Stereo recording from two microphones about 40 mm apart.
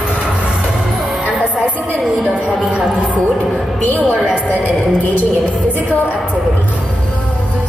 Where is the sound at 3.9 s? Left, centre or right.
Left.